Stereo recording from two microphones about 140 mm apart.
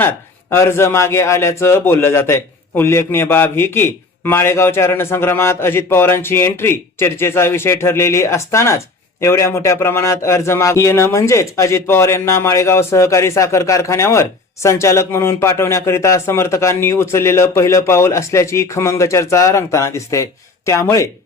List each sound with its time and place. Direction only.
0.5 s a man's voice: 20° left (ahead or behind)